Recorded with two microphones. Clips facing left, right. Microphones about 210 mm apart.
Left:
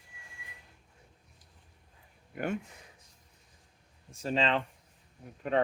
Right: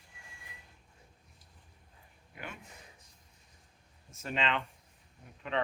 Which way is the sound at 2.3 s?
50° left (ahead or behind).